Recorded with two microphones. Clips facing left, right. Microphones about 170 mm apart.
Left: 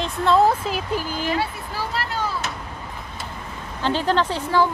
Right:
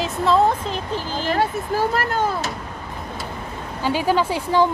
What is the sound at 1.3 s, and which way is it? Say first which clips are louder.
Speech: right 8 dB; 50° right (ahead or behind).